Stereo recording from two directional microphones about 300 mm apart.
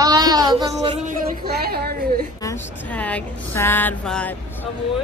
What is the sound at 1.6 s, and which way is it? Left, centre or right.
Speech, right.